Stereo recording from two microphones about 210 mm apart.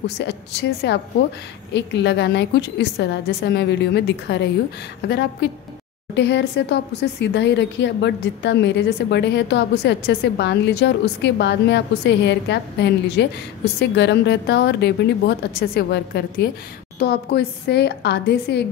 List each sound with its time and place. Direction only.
0.0 s a woman's voice: 55° left (ahead or behind)